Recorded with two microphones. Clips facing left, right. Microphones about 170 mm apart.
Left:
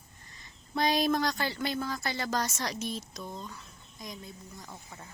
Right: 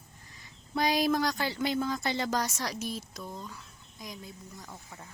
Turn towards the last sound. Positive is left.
turn(degrees=0)  # may be behind; listen again after turning